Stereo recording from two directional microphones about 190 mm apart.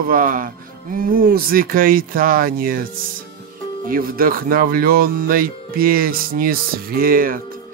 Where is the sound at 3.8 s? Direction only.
50° right (ahead or behind).